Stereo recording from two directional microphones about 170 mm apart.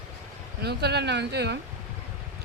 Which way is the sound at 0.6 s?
75° right (ahead or behind).